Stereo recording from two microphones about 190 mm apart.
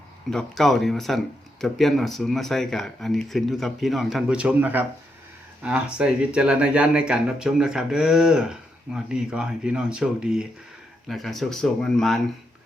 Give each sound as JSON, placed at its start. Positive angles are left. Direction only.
{"t": 0.3, "sound": "speech", "side_deg": 0}